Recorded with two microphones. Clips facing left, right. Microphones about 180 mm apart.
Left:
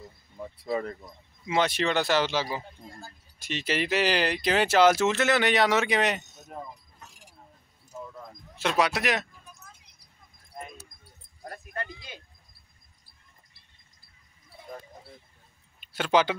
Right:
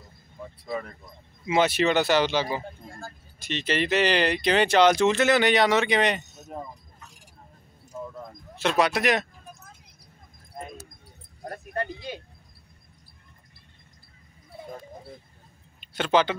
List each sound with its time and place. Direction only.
1.5 s speech: 5° right (ahead or behind)
8.6 s speech: 5° left (ahead or behind)
11.4 s a sound: 40° right (ahead or behind)
15.8 s speech: 5° left (ahead or behind)